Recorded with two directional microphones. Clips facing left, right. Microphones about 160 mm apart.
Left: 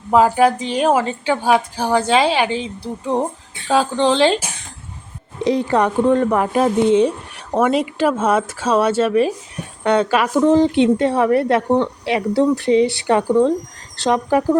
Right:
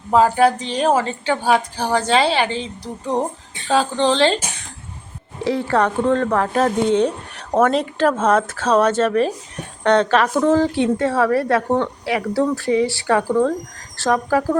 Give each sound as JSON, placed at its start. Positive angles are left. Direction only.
{"t": 0.1, "sound": "a woman's voice", "side_deg": 10}
{"t": 5.5, "sound": "a woman's voice", "side_deg": 15}